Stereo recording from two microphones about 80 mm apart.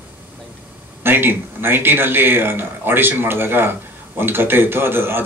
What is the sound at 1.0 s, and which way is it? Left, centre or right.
Speech, right.